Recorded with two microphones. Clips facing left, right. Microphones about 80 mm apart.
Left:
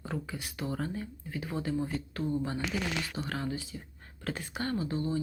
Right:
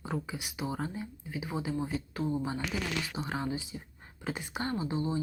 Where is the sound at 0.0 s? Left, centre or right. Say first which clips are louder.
Right 1 dB; centre.